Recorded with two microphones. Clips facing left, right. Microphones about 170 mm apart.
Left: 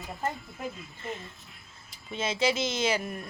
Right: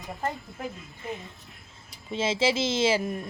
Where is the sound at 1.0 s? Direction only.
15° right (ahead or behind).